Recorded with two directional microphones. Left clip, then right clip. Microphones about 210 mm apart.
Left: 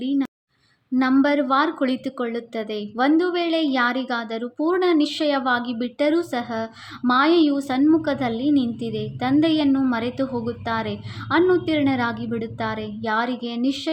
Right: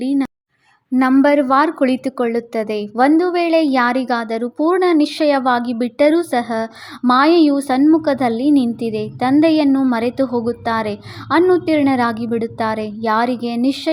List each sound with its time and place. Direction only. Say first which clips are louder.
0.0 s a woman's voice: right 5 dB; 40° right (ahead or behind)